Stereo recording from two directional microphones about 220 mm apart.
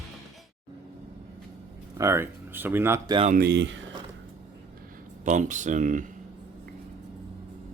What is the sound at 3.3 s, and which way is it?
Speech, 50° right (ahead or behind).